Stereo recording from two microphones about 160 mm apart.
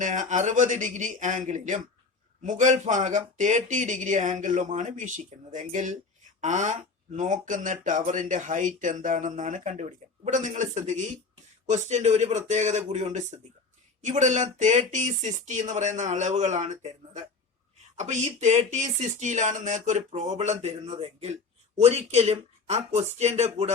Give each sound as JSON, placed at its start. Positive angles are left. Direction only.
{"t": 0.0, "sound": "speech", "side_deg": -50}